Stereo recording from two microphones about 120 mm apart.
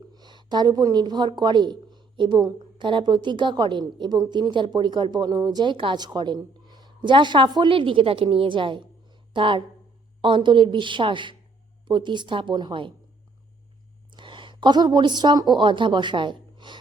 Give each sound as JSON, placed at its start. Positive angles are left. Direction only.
{"t": 0.1, "sound": "a woman's voice", "side_deg": -35}
{"t": 14.1, "sound": "a woman's voice", "side_deg": -40}